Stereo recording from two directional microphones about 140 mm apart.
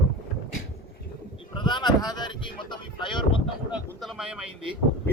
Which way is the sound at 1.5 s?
35° left (ahead or behind).